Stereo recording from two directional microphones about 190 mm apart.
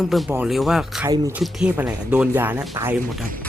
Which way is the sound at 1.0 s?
15° right (ahead or behind).